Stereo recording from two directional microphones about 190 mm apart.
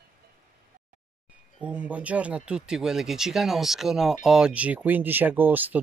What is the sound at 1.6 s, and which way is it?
Speech, 5° right (ahead or behind).